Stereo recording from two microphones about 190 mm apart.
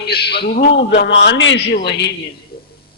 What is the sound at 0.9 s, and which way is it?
A man's voice, 65° left (ahead or behind).